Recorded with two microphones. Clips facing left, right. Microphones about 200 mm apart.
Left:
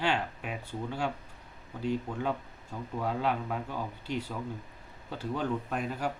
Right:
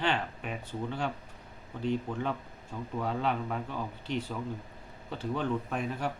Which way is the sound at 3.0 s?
5° left (ahead or behind).